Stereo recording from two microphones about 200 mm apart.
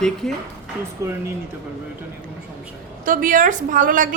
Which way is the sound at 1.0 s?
15° right (ahead or behind).